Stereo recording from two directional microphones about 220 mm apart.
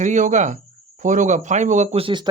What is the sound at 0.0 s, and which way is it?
Speech, 35° right (ahead or behind).